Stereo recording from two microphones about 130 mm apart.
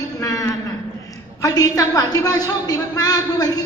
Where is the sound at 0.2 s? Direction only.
25° left (ahead or behind).